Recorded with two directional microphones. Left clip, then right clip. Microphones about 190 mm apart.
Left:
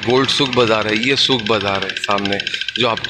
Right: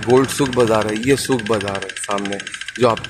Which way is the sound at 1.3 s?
15° left (ahead or behind).